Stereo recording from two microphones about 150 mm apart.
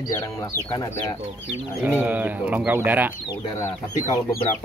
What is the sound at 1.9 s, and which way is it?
Speech, 10° right (ahead or behind).